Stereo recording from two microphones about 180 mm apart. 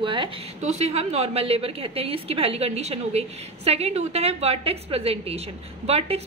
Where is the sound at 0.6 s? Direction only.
35° right (ahead or behind).